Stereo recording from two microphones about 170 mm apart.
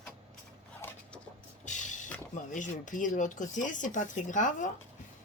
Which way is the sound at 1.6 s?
45° left (ahead or behind).